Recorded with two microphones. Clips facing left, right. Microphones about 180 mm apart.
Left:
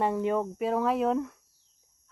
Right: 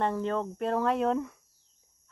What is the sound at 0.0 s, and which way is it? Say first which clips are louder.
Speech: left 2 dB; 10° left (ahead or behind).